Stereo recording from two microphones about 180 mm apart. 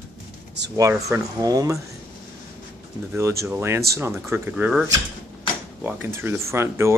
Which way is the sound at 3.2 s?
15° right (ahead or behind).